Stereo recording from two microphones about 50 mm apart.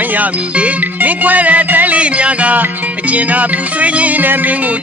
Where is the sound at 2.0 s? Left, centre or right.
Right.